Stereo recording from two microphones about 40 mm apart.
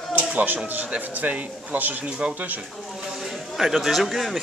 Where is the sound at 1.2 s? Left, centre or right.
Right.